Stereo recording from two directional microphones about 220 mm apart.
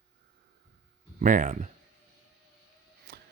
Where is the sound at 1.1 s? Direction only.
35° right (ahead or behind).